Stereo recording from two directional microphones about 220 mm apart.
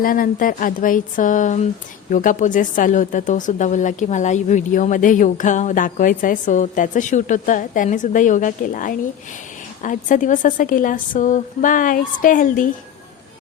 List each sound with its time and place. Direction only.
0.0 s a woman's voice: 40° left (ahead or behind)